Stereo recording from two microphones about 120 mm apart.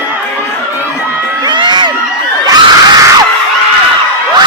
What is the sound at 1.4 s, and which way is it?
Crowd, 40° right (ahead or behind).